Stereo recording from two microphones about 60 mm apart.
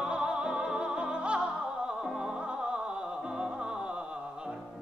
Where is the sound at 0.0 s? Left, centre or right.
Centre.